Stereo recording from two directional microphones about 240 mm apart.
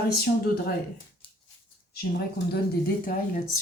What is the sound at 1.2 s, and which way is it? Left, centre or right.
Dog, left.